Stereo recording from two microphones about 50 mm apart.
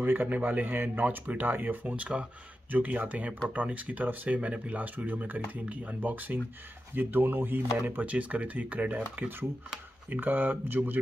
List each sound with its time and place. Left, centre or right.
0.0 s speech: right
8.0 s speech: right